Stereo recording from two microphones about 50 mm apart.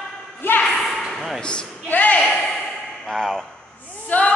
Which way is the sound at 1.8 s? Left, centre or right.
Left.